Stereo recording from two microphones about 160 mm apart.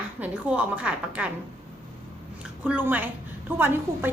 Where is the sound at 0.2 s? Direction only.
10° right (ahead or behind).